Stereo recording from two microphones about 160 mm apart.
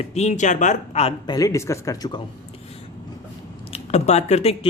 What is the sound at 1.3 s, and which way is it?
Speech, 20° left (ahead or behind).